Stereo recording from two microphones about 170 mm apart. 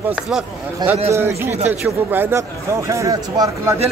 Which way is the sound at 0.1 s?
5° right (ahead or behind).